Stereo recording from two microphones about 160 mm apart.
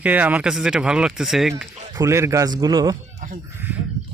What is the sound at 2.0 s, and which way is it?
Speech, 15° right (ahead or behind).